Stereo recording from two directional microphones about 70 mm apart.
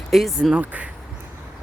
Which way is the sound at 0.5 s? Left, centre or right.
Centre.